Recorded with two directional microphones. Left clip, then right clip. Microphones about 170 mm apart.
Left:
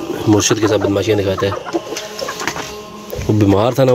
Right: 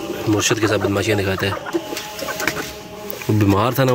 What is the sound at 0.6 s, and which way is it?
Speech, 15° left (ahead or behind).